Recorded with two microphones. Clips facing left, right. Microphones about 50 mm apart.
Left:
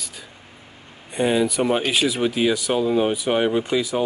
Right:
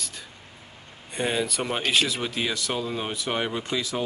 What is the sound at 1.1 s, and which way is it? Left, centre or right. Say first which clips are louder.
Speech: left 7 dB; centre.